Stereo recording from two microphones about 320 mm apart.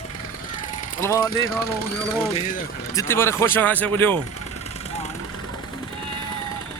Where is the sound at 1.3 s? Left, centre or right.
Left.